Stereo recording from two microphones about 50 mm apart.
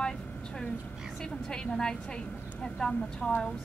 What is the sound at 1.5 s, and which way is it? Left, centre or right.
Speech, centre.